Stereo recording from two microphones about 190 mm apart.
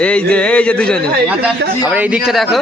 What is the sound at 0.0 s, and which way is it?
A man's voice, 5° left (ahead or behind).